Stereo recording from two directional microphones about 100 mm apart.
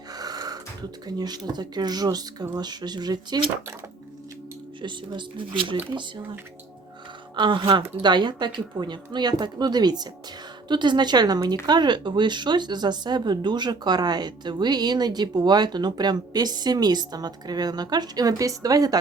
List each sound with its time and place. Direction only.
0.1 s speech: 40° right (ahead or behind)
4.8 s speech: 50° right (ahead or behind)
7.3 s speech: 55° right (ahead or behind)
8.0 s speech: 50° right (ahead or behind)